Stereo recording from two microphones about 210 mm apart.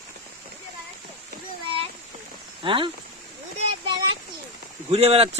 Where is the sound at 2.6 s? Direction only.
25° right (ahead or behind).